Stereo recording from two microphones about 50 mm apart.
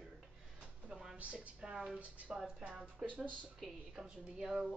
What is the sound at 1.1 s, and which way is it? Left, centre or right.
A woman's voice, right.